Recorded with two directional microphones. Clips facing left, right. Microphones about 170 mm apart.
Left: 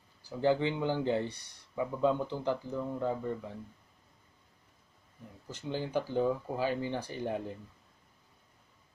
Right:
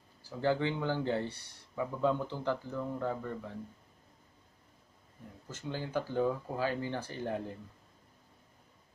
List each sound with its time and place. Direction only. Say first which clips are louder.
0.2 s speech: left 2 dB; 15° left (ahead or behind)
5.5 s speech: left 3 dB; 20° left (ahead or behind)